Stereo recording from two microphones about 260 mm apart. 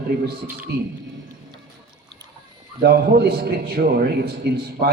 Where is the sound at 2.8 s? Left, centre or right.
Right.